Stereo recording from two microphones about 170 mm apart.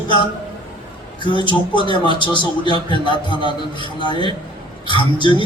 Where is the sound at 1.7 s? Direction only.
30° right (ahead or behind).